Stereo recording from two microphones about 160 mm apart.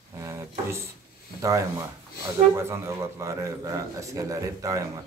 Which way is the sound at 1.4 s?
20° right (ahead or behind).